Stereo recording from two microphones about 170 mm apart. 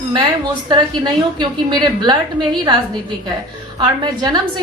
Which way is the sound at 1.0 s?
25° right (ahead or behind).